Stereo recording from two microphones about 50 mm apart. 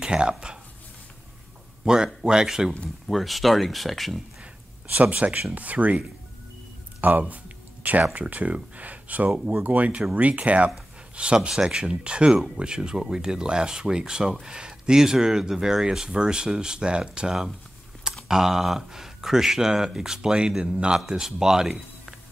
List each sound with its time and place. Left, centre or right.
0.0 s speech: centre
2.2 s speech: centre
3.1 s speech: centre
4.9 s speech: right
7.0 s a sound: right
8.1 s speech: right; by 22.1 s centre